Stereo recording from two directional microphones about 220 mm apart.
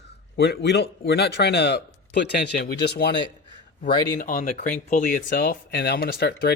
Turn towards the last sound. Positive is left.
turn(degrees=50)  # may be behind; listen again after turning